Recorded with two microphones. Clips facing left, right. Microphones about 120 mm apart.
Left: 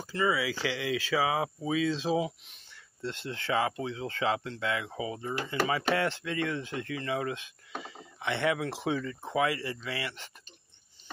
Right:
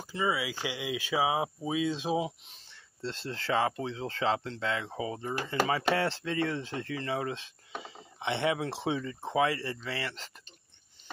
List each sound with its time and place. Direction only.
0.0 s speech: 10° right (ahead or behind)
2.5 s speech: 35° right (ahead or behind)